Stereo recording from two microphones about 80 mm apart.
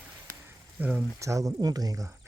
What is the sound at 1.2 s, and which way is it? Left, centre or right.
Speech, right.